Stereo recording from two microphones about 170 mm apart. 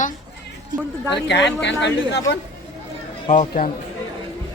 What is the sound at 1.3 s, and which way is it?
Speech, 90° left.